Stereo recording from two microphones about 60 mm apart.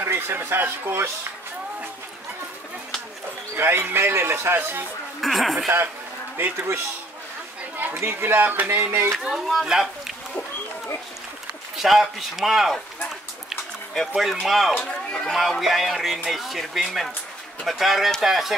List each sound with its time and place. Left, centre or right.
0.0 s speech: right
3.5 s a man's voice: right
5.2 s speech: centre
6.3 s a man's voice: right
7.9 s a man's voice: right
8.4 s a sound: right
8.6 s a man's voice: right
9.2 s speech: centre
11.7 s speech: centre
13.9 s speech: centre
14.8 s a man's voice: centre